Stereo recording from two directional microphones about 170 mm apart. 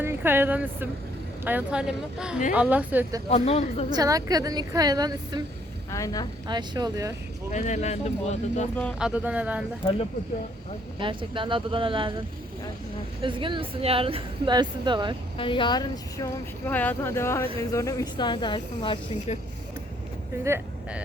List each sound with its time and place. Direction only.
0.0 s speech: 15° right (ahead or behind)
3.2 s speech: 35° left (ahead or behind)
3.9 s speech: 20° right (ahead or behind)
5.9 s speech: 20° left (ahead or behind)
6.5 s speech: 25° right (ahead or behind)
7.5 s speech: 45° left (ahead or behind)
9.0 s speech: 5° right (ahead or behind)
11.0 s speech: 30° right (ahead or behind)
13.2 s speech: 30° right (ahead or behind)
15.4 s speech: 30° left (ahead or behind)
20.4 s speech: 15° right (ahead or behind)